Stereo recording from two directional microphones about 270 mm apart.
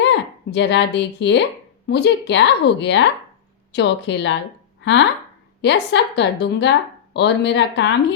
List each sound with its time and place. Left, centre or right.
0.0 s a woman's voice: left